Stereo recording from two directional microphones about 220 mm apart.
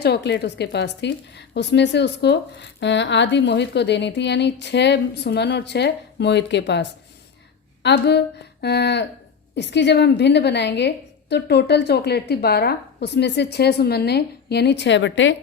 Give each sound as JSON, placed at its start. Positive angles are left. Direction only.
{"t": 0.0, "sound": "a woman's voice", "side_deg": 50}